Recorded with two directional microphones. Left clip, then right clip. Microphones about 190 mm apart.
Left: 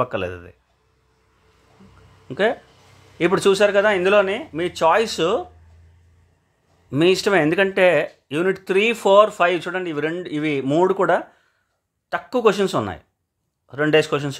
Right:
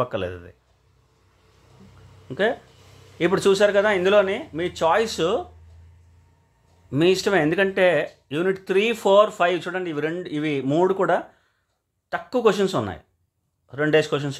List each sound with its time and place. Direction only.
0.0 s speech: 10° left (ahead or behind)
2.2 s speech: 10° left (ahead or behind)
6.9 s speech: 10° left (ahead or behind)